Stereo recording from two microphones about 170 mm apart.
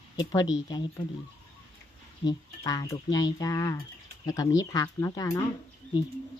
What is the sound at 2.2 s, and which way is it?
Speech, 20° left (ahead or behind).